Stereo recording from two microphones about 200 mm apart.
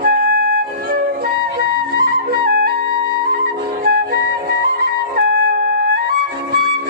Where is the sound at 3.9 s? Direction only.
50° right (ahead or behind).